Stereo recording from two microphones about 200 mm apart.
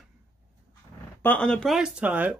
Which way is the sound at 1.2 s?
5° left (ahead or behind).